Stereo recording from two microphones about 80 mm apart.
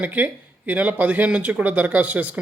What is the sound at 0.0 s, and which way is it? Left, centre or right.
Speech, right.